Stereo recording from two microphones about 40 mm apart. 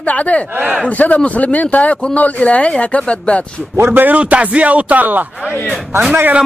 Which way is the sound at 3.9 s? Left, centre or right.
Right.